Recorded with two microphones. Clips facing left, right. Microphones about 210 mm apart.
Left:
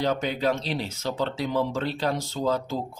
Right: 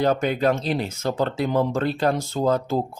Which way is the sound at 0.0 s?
50° right (ahead or behind).